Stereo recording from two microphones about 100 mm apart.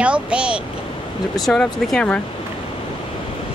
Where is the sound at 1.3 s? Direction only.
Centre (ahead or behind).